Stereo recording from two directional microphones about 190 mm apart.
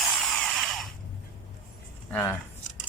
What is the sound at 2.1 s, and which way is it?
Keys jangling, 10° left (ahead or behind).